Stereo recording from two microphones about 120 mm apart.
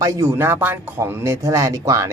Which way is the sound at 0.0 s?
25° right (ahead or behind).